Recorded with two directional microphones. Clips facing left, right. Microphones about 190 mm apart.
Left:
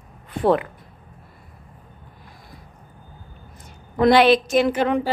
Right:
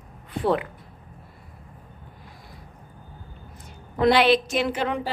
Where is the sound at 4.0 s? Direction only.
45° left (ahead or behind).